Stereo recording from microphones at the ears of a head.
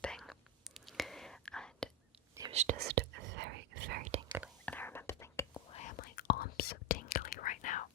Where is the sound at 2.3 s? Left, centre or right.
Right.